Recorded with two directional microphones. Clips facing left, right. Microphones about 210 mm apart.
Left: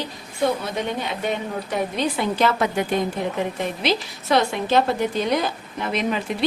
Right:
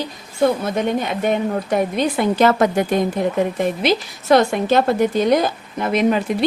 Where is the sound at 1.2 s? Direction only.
50° right (ahead or behind).